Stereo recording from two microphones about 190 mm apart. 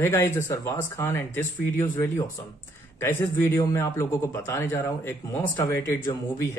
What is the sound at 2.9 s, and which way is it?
A man's voice, 10° left (ahead or behind).